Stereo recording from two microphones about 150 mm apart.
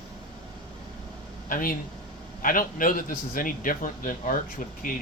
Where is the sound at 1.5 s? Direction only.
70° left (ahead or behind).